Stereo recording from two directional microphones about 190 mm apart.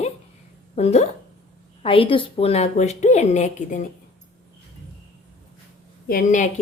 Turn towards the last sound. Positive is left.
turn(degrees=45)  # may be behind; listen again after turning